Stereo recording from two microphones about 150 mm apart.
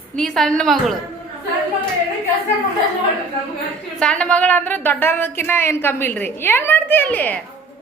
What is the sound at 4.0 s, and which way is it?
A woman's voice, 5° left (ahead or behind).